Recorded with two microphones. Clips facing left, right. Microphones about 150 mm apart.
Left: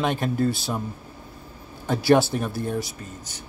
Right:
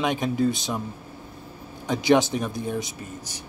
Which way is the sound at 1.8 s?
15° right (ahead or behind).